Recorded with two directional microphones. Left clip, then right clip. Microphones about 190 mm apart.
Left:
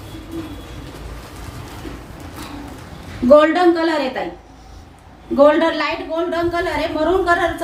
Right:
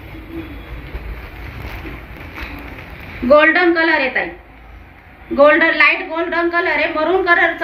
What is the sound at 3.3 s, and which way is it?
Speech, 25° left (ahead or behind).